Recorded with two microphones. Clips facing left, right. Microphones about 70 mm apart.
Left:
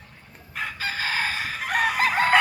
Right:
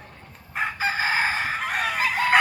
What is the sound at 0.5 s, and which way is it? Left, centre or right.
Chicken, right.